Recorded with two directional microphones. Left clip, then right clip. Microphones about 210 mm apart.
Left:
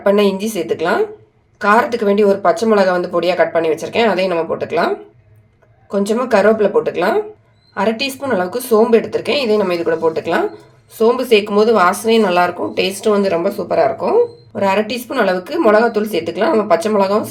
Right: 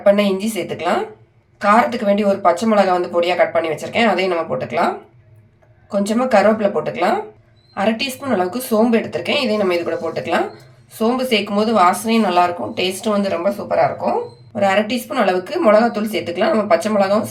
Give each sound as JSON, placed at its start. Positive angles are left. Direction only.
{"t": 0.0, "sound": "speech", "side_deg": 35}
{"t": 5.9, "sound": "a woman's voice", "side_deg": 30}